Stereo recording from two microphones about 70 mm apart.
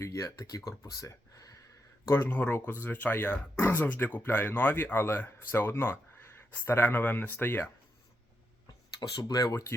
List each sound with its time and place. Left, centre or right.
0.0 s speech: left
2.0 s speech: left
2.3 s speech: left
9.0 s speech: left